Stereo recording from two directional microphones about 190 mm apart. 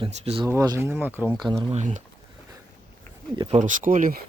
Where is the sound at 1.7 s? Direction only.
40° right (ahead or behind).